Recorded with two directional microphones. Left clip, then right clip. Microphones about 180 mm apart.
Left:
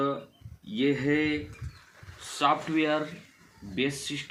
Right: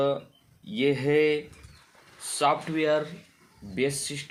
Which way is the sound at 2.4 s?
35° right (ahead or behind).